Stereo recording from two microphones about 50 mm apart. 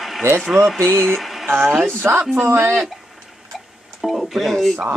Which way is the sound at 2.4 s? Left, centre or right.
Right.